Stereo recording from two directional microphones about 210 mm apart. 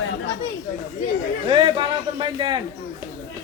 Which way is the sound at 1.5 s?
20° right (ahead or behind).